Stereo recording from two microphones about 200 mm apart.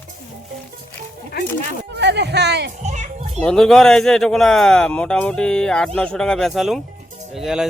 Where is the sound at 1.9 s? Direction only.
60° right (ahead or behind).